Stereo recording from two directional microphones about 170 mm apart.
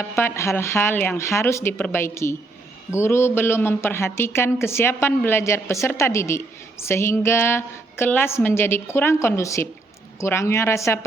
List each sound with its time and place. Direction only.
0.0 s speech: 15° left (ahead or behind)